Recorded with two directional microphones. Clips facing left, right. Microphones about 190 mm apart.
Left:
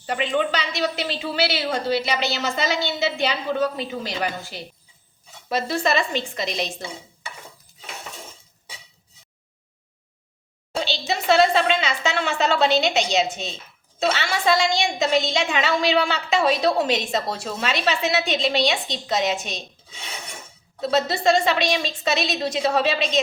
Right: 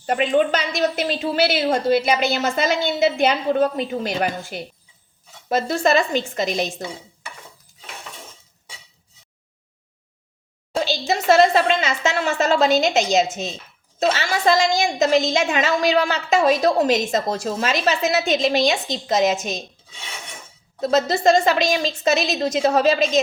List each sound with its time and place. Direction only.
0.0 s a woman's voice: 45° right (ahead or behind)
10.8 s a sound: 45° right (ahead or behind)
14.0 s a woman's voice: 40° right (ahead or behind)
20.8 s a woman's voice: 45° right (ahead or behind)